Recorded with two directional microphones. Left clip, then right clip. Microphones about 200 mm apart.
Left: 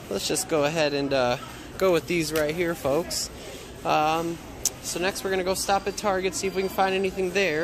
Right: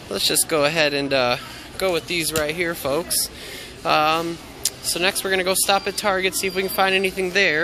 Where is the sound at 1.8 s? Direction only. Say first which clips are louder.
Right 1 dB; 50° left (ahead or behind).